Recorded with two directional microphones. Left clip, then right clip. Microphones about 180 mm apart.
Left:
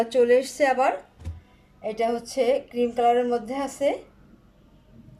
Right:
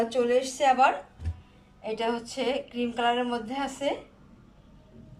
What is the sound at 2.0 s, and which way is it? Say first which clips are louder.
Speech: left 6 dB; 35° left (ahead or behind).